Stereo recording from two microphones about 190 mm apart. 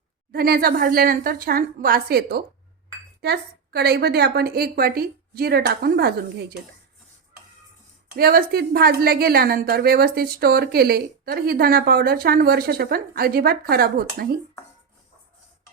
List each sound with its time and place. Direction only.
0.3 s a woman's voice: 55° right (ahead or behind)
8.1 s a woman's voice: 50° right (ahead or behind)